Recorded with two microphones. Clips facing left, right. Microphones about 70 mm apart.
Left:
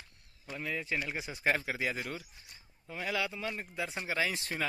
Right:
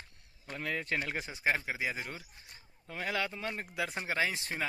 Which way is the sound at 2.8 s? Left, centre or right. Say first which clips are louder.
Even; right.